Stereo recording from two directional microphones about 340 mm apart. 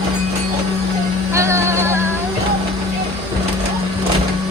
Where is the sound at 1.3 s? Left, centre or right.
Centre.